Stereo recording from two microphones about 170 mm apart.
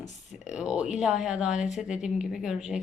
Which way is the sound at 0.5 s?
5° right (ahead or behind).